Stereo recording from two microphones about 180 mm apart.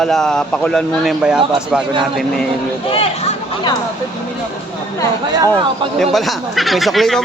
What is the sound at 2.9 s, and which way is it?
Speech, 30° left (ahead or behind).